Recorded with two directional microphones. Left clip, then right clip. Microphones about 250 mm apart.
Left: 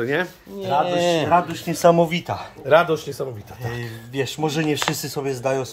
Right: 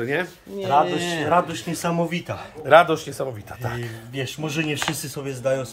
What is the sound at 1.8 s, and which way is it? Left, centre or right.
Speech, left.